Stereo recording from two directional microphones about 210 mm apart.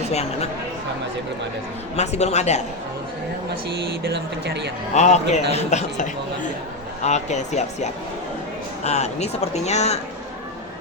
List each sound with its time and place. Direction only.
0.1 s speech: 30° left (ahead or behind)
2.0 s speech: 30° left (ahead or behind)
4.0 s speech: 55° right (ahead or behind)
4.9 s speech: 35° left (ahead or behind)